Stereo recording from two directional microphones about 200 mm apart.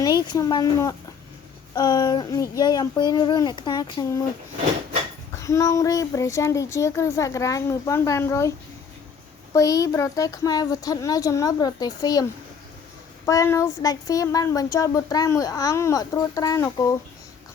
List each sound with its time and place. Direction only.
0.0 s a child's voice: 20° left (ahead or behind)
5.3 s speech: 15° left (ahead or behind)
13.2 s speech: 15° left (ahead or behind)